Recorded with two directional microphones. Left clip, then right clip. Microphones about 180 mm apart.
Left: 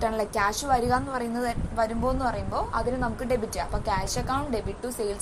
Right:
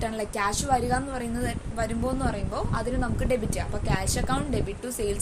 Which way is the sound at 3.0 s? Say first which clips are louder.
Even; 30° right (ahead or behind).